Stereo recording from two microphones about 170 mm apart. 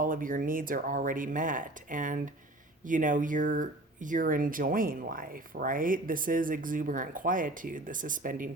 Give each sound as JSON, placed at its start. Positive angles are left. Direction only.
{"t": 0.0, "sound": "speech", "side_deg": -55}